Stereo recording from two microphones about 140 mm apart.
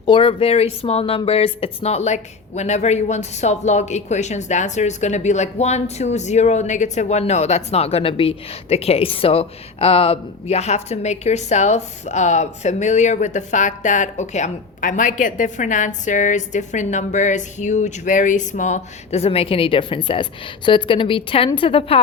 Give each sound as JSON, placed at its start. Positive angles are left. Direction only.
{"t": 0.0, "sound": "a woman's voice", "side_deg": 40}